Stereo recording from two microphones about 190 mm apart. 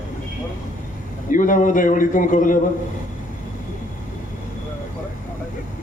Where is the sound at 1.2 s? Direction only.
45° left (ahead or behind).